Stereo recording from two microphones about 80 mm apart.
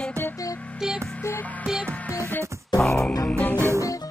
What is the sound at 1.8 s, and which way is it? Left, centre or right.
Music, centre.